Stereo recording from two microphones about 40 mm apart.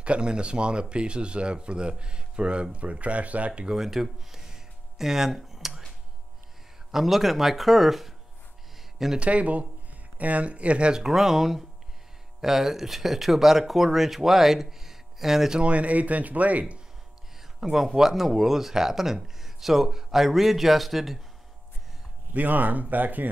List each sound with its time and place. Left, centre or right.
0.0 s speech: right
3.6 s speech: centre
4.9 s a sound: centre
6.9 s speech: centre
9.2 s speech: right
11.0 s speech: centre
15.6 s speech: right
17.6 s speech: centre
22.3 s speech: right